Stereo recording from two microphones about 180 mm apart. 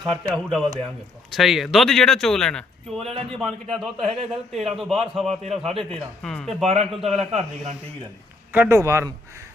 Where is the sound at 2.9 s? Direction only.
35° right (ahead or behind).